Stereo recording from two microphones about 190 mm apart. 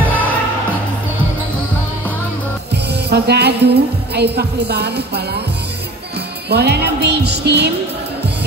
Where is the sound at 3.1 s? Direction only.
60° right (ahead or behind).